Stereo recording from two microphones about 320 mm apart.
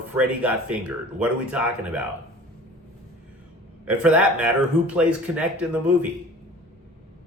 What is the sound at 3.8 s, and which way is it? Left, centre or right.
Speech, centre.